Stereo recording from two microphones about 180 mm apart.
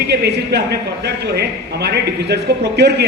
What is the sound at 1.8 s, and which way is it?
A man's voice, 65° right (ahead or behind).